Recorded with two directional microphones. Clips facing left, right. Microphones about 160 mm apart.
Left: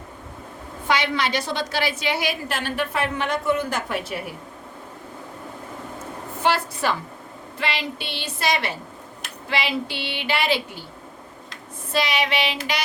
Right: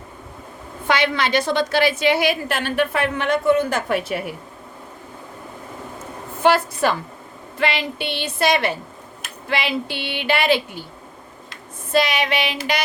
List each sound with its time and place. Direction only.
0.9 s a woman's voice: 65° right (ahead or behind)
6.4 s female singing: 55° right (ahead or behind)
7.6 s a woman's voice: 55° right (ahead or behind)
11.9 s female singing: 50° right (ahead or behind)